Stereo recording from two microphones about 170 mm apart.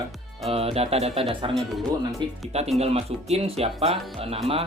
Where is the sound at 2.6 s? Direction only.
40° right (ahead or behind).